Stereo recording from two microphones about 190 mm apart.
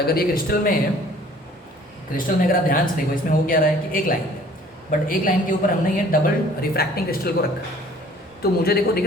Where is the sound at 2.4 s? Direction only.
50° left (ahead or behind).